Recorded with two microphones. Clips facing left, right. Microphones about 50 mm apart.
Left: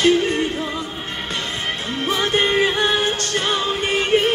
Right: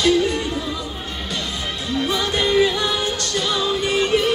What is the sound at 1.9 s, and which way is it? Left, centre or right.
Music, left.